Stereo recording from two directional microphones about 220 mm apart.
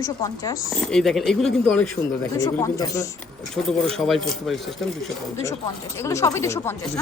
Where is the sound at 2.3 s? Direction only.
15° left (ahead or behind).